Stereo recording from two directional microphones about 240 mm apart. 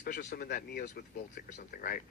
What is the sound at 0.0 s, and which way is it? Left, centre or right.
Speech, left.